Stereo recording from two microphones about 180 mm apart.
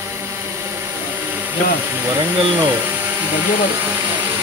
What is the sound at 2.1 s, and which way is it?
Speech, 10° right (ahead or behind).